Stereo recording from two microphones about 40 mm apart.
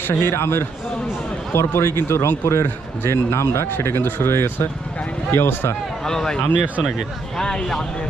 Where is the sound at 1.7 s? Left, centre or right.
Left.